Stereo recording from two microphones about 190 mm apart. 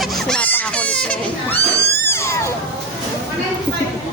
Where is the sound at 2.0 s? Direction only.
15° left (ahead or behind).